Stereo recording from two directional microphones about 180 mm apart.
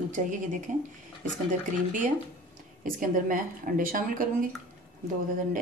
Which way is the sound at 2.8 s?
50° right (ahead or behind).